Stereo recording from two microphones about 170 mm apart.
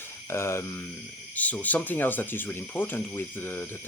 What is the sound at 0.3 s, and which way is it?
Speech, 15° left (ahead or behind).